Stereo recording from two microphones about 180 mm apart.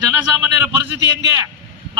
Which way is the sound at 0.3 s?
10° right (ahead or behind).